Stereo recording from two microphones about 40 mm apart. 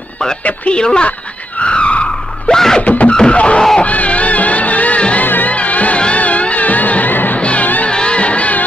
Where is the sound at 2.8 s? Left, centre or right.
Left.